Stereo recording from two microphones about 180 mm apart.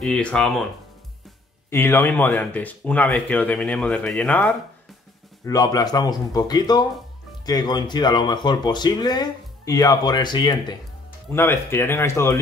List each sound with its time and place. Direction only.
0.0 s speech: 5° left (ahead or behind)
1.7 s speech: 15° left (ahead or behind)
5.4 s speech: 20° left (ahead or behind)
11.3 s speech: 15° left (ahead or behind)